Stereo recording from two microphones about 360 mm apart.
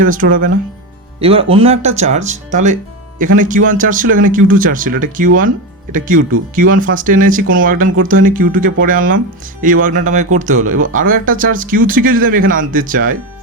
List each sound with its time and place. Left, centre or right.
0.0 s speech: right